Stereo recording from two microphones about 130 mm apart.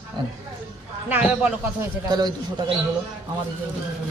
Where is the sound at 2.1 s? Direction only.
30° right (ahead or behind).